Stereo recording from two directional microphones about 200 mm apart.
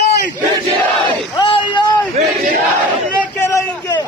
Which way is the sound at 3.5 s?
20° left (ahead or behind).